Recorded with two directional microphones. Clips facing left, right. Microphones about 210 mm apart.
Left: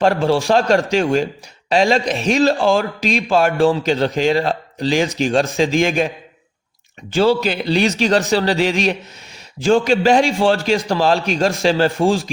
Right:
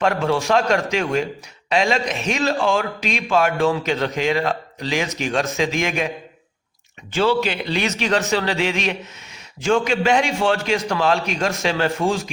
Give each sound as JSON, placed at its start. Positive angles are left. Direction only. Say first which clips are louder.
{"t": 0.0, "sound": "a man's voice", "louder": "left 4 dB", "side_deg": 35}
{"t": 7.1, "sound": "a man's voice", "louder": "left 4 dB", "side_deg": 35}